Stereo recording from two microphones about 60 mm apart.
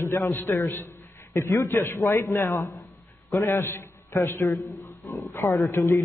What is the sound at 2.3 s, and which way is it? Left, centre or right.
Speech, left.